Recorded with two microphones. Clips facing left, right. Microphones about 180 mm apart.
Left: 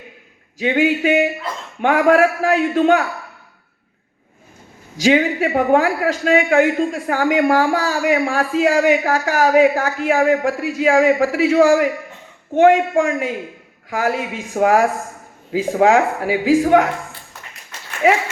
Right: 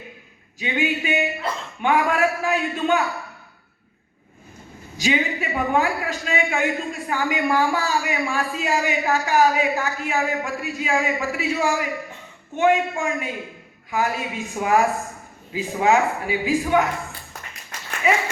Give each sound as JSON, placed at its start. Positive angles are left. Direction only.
{"t": 0.8, "sound": "a man's voice", "side_deg": 90}
{"t": 4.9, "sound": "a man's voice", "side_deg": 90}
{"t": 18.0, "sound": "speech", "side_deg": 80}